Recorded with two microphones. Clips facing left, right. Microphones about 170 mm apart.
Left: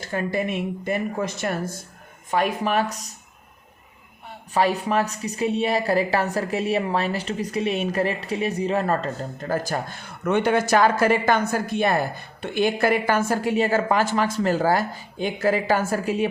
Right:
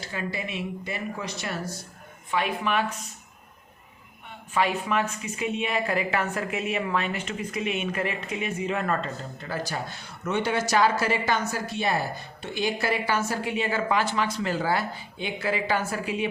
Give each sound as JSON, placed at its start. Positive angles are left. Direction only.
{"t": 0.0, "sound": "a woman's voice", "side_deg": 50}
{"t": 4.5, "sound": "a woman's voice", "side_deg": 35}